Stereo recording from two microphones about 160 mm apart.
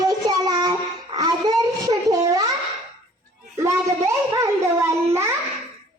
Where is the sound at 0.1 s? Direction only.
25° right (ahead or behind).